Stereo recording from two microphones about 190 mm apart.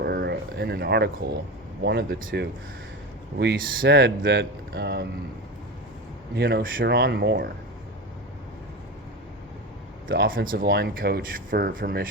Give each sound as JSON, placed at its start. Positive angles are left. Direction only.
{"t": 0.0, "sound": "speech", "side_deg": -60}
{"t": 6.3, "sound": "speech", "side_deg": -60}
{"t": 10.1, "sound": "speech", "side_deg": -55}